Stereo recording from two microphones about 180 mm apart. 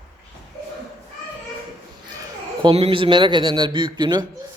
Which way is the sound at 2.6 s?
30° right (ahead or behind).